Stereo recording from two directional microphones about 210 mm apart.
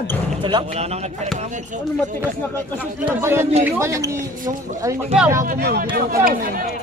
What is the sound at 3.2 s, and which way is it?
Speech, 10° right (ahead or behind).